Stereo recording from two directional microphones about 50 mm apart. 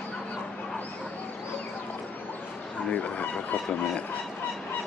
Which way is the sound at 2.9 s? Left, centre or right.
Left.